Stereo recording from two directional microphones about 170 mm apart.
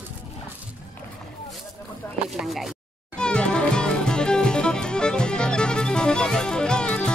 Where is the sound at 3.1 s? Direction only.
5° left (ahead or behind).